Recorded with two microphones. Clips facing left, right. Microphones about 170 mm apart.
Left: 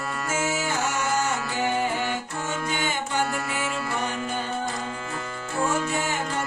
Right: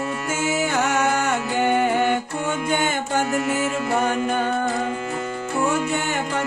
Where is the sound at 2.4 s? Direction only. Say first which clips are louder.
Right 6 dB; 50° right (ahead or behind).